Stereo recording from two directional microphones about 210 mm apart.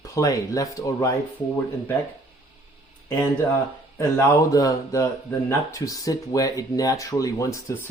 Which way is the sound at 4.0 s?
15° left (ahead or behind).